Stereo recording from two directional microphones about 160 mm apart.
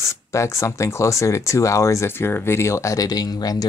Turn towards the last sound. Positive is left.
turn(degrees=25)  # may be behind; listen again after turning